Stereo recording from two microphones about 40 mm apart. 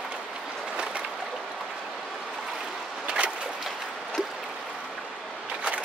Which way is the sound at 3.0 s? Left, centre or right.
Right.